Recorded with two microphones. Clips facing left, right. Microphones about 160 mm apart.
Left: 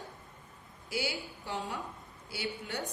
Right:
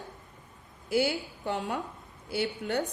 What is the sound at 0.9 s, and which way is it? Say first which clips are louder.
A woman's voice: right 9 dB; 55° right (ahead or behind).